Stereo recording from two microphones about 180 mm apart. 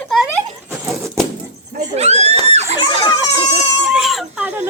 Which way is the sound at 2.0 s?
35° right (ahead or behind).